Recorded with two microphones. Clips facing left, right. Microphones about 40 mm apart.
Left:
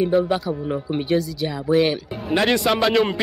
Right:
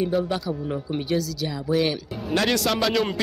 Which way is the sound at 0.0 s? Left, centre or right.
Centre.